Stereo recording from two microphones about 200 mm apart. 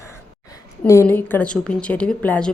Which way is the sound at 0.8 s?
10° left (ahead or behind).